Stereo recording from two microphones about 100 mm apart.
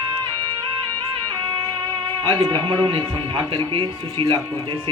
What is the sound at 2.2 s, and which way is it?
A man's voice, 50° right (ahead or behind).